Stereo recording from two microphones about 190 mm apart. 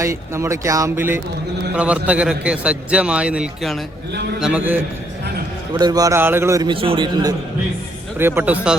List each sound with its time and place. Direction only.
0.0 s a man's voice: 15° right (ahead or behind)
5.7 s a man's voice: 20° right (ahead or behind)
8.2 s speech: 10° right (ahead or behind)